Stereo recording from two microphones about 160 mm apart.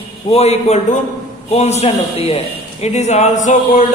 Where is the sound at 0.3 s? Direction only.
40° left (ahead or behind).